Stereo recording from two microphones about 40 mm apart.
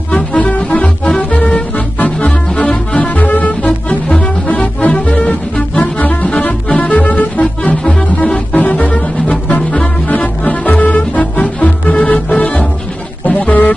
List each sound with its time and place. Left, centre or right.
0.1 s music: left
3.2 s music: left
13.5 s music: left